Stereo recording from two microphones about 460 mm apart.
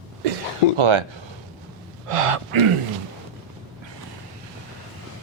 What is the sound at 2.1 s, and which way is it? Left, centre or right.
Speech, right.